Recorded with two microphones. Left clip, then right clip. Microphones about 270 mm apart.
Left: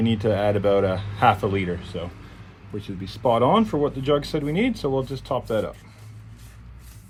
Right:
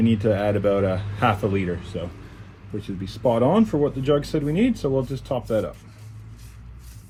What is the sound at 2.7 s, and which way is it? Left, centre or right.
Speech, left.